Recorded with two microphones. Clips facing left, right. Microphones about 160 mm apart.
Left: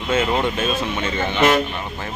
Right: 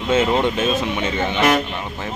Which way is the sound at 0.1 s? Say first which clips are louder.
Right 2 dB; 20° right (ahead or behind).